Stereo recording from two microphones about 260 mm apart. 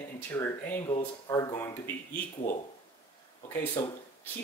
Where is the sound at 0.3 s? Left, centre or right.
Centre.